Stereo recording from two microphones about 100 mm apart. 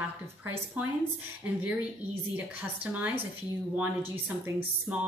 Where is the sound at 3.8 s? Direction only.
15° right (ahead or behind).